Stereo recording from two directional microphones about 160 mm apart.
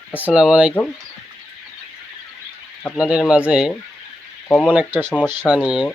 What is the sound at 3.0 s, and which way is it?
Speech, 5° right (ahead or behind).